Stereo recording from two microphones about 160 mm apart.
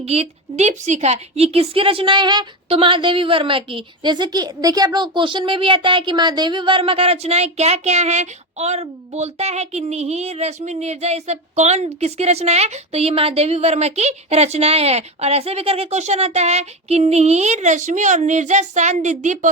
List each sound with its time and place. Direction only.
0.0 s a woman's voice: 40° right (ahead or behind)